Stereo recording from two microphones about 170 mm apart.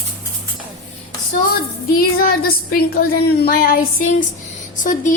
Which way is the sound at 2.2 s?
60° left (ahead or behind).